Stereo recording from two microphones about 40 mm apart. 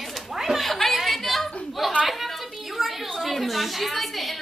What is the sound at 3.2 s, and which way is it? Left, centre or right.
A woman's voice, centre.